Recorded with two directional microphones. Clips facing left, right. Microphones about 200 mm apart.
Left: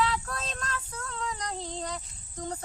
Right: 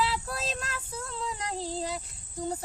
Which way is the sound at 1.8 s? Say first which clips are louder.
Right 2 dB; 5° right (ahead or behind).